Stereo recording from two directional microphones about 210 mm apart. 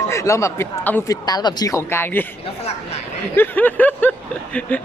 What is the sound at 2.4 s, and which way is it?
Chatter, 30° left (ahead or behind).